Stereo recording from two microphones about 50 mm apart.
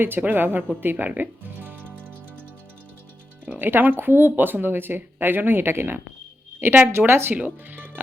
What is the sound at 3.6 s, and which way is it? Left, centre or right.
Speech, right.